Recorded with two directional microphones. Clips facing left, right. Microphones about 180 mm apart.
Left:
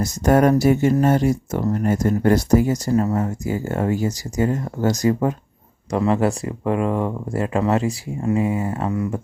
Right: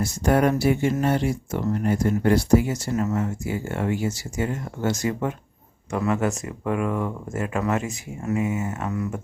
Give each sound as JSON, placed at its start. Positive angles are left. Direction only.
{"t": 0.0, "sound": "speech", "side_deg": 45}